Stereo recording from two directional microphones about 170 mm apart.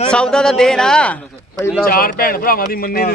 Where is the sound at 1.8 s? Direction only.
60° left (ahead or behind).